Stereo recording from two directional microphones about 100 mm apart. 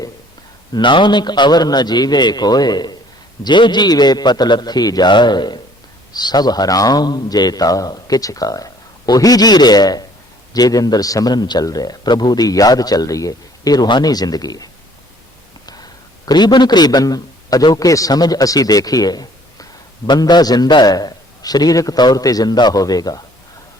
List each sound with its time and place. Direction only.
0.7 s a man's voice: 55° left (ahead or behind)
15.6 s a sound: 40° left (ahead or behind)
17.7 s a man's voice: 35° left (ahead or behind)